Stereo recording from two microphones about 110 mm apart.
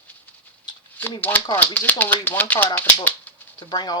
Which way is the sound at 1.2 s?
15° left (ahead or behind).